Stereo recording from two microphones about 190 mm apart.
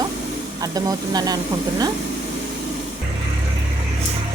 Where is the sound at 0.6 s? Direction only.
20° right (ahead or behind).